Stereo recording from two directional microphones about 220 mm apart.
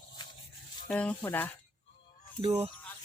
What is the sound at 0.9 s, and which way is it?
Speech, 5° left (ahead or behind).